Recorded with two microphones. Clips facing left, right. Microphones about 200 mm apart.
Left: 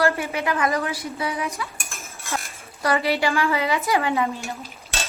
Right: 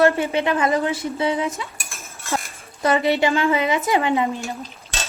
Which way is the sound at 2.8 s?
20° right (ahead or behind).